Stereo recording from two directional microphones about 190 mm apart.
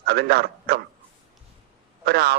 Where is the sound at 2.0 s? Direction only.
55° right (ahead or behind).